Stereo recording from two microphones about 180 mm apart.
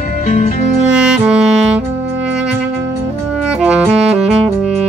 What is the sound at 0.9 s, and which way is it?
Music, 5° right (ahead or behind).